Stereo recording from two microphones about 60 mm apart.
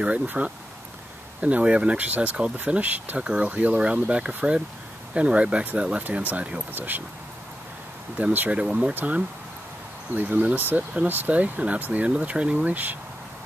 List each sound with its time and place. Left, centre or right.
0.0 s speech: right
6.7 s speech: right
8.2 s speech: right
8.5 s speech: centre